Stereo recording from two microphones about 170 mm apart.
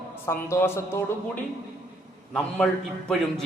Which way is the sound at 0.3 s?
15° left (ahead or behind).